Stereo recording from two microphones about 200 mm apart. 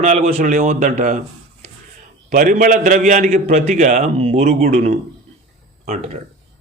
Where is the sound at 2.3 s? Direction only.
45° right (ahead or behind).